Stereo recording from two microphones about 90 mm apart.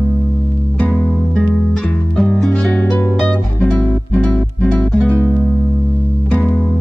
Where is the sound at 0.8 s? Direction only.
15° left (ahead or behind).